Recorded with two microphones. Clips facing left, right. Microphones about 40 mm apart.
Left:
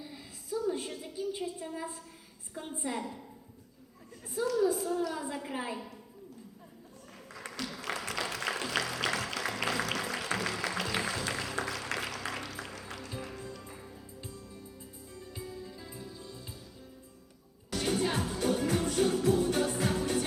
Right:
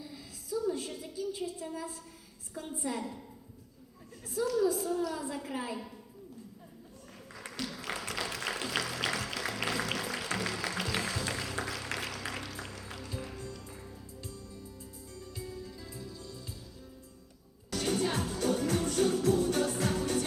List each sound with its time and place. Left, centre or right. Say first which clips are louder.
0.0 s a sound: even; left
0.9 s a woman's voice: left 1 dB; centre
1.1 s a woman's voice: left 1 dB; left
3.0 s a woman's voice: even; centre
4.4 s a woman's voice: even; left
4.8 s a woman's voice: even; centre
7.6 s music: left 1 dB; centre
17.7 s music: left 1 dB; left